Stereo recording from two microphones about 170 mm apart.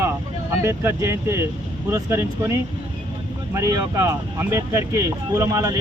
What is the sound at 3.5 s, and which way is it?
Speech, 20° right (ahead or behind).